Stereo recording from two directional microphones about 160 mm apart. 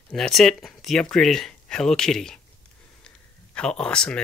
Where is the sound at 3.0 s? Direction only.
5° left (ahead or behind).